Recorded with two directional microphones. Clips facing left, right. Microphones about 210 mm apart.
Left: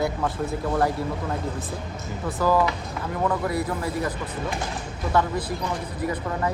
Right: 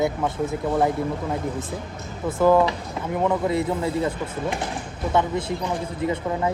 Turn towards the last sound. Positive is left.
turn(degrees=-25)  # may be behind; listen again after turning